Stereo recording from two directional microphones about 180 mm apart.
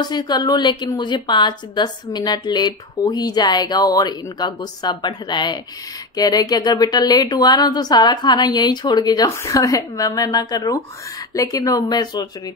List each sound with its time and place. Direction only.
0.0 s a woman's voice: 25° left (ahead or behind)